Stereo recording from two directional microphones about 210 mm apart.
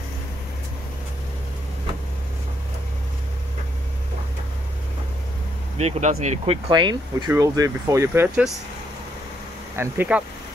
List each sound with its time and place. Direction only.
5.8 s speech: 30° right (ahead or behind); by 8.5 s 10° right (ahead or behind)
9.8 s speech: 5° right (ahead or behind)